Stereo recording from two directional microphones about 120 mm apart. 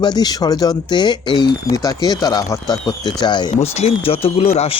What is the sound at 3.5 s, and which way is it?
A man's voice, 60° left (ahead or behind).